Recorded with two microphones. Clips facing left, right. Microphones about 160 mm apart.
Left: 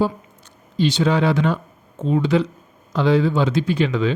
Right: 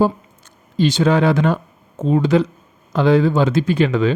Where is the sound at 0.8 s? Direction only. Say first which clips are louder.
Right 3 dB; 45° right (ahead or behind).